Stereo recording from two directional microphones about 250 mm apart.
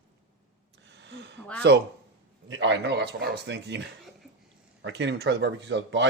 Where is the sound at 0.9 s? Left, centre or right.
Right.